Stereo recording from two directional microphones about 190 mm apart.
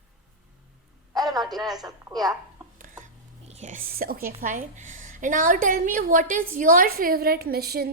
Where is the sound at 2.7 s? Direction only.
45° right (ahead or behind).